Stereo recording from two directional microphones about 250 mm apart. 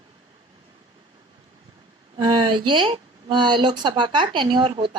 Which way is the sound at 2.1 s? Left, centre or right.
Centre.